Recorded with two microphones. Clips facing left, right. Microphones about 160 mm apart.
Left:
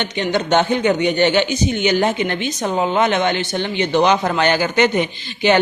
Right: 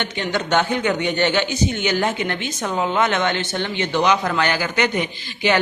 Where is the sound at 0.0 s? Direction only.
20° left (ahead or behind).